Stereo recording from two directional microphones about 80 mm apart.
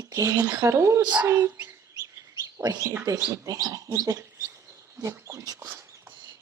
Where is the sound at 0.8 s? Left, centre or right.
Right.